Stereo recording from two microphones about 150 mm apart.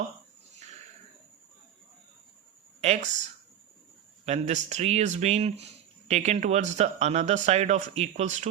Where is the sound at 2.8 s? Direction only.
50° right (ahead or behind).